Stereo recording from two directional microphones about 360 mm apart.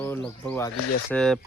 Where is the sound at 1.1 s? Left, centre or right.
Centre.